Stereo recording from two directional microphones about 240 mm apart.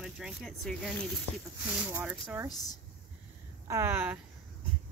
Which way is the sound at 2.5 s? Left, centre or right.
Centre.